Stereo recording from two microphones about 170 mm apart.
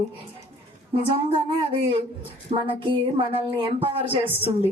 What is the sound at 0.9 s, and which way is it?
A woman's voice, 35° right (ahead or behind).